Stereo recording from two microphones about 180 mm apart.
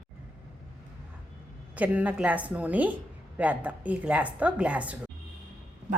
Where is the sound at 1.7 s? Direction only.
10° right (ahead or behind).